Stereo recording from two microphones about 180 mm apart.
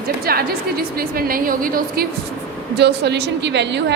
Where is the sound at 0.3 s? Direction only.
55° right (ahead or behind).